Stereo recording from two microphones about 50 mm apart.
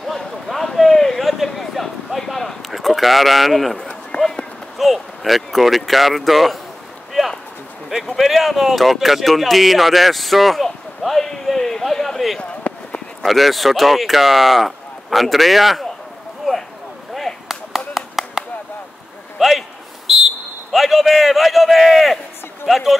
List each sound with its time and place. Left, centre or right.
0.0 s a sound: centre
3.7 s run: centre
4.7 s speech: centre
7.2 s a sound: centre
8.2 s speech: centre
17.1 s whip: centre
17.5 s clapping: centre
19.3 s a sound: centre
22.7 s speech: centre